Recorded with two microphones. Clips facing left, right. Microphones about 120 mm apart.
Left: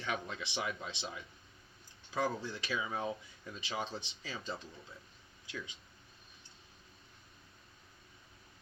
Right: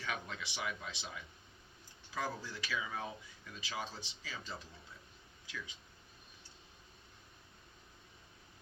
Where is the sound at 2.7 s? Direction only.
25° left (ahead or behind).